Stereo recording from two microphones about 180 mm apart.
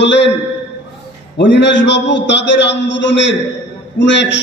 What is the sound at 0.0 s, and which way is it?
Speech, 80° left.